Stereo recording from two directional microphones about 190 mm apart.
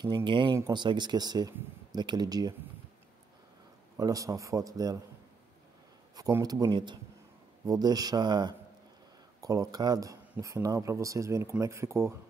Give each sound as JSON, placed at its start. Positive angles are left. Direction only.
{"t": 0.0, "sound": "speech", "side_deg": -25}
{"t": 3.9, "sound": "speech", "side_deg": -20}
{"t": 6.1, "sound": "speech", "side_deg": -20}